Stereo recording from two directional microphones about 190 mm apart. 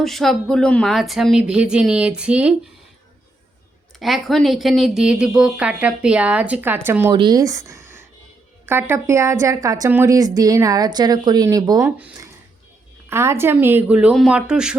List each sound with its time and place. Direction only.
0.0 s speech: centre (ahead or behind)
4.0 s speech: centre (ahead or behind)
7.1 s a woman's voice: 25° right (ahead or behind); by 14.8 s 5° right (ahead or behind)